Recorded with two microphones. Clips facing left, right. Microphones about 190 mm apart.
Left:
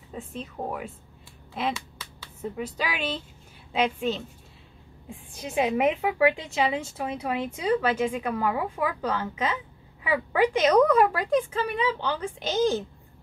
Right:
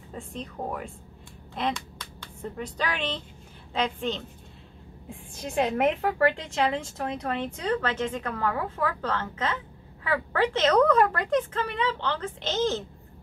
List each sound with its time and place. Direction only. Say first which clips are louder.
0.1 s a woman's voice: left 1 dB; 5° left (ahead or behind)